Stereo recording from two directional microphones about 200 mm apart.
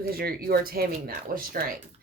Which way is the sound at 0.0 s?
50° right (ahead or behind).